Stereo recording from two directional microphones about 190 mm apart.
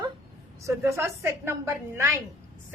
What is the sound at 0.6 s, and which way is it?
A woman's voice, 15° right (ahead or behind).